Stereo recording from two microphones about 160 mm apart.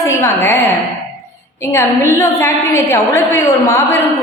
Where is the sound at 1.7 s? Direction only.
15° left (ahead or behind).